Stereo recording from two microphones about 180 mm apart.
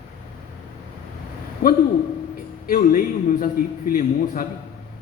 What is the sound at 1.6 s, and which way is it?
A man's voice, 55° left (ahead or behind).